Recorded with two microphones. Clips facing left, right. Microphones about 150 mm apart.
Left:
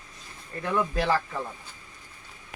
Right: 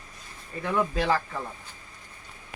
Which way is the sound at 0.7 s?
5° right (ahead or behind).